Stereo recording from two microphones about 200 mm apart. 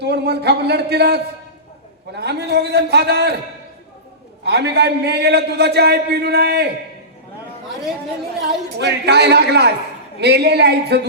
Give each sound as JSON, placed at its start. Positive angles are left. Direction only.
{"t": 0.0, "sound": "a man's voice", "side_deg": -55}
{"t": 4.4, "sound": "a man's voice", "side_deg": -55}
{"t": 8.8, "sound": "a man's voice", "side_deg": -55}